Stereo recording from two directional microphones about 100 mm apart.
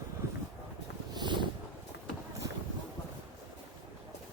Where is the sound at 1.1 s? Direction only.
50° right (ahead or behind).